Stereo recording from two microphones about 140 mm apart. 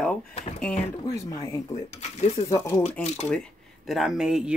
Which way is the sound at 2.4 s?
15° left (ahead or behind).